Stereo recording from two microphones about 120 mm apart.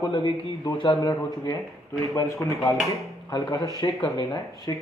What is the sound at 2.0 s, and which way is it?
Speech, 25° left (ahead or behind).